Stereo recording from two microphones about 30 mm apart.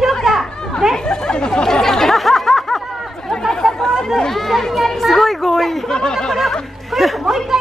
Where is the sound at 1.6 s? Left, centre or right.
Centre.